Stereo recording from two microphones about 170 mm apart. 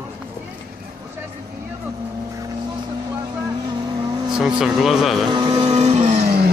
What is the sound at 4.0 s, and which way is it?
Vehicle, 25° right (ahead or behind).